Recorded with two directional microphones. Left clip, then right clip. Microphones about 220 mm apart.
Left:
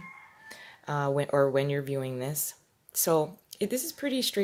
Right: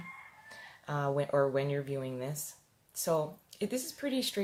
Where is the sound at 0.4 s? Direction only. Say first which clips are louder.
Left 6 dB; 40° left (ahead or behind).